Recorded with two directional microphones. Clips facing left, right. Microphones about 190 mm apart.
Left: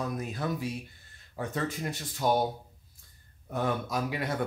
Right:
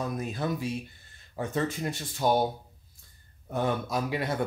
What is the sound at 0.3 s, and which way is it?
Speech, 25° right (ahead or behind).